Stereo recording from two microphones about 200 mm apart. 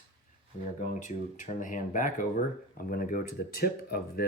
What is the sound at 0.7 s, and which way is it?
Speech, 40° left (ahead or behind).